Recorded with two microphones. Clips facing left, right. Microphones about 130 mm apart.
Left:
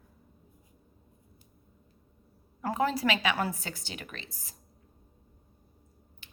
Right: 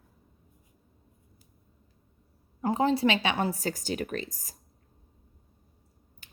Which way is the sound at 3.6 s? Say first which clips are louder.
Right 10 dB; 40° right (ahead or behind).